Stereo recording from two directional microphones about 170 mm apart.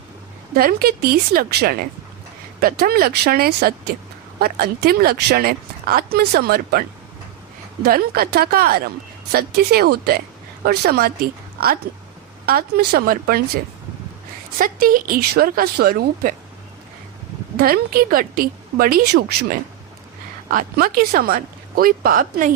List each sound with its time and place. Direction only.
0.5 s a woman's voice: 60° right (ahead or behind)
12.5 s speech: 65° right (ahead or behind)
14.6 s speech: 55° right (ahead or behind)
17.6 s speech: 60° right (ahead or behind)
20.5 s speech: 55° right (ahead or behind)